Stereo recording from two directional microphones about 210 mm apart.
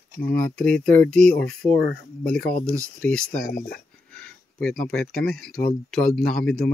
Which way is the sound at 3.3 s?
45° left (ahead or behind).